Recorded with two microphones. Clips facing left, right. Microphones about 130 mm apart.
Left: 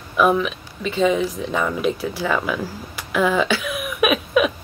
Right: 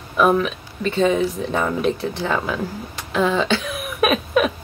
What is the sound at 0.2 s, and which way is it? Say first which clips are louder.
Speech: right 1 dB; 40° right (ahead or behind).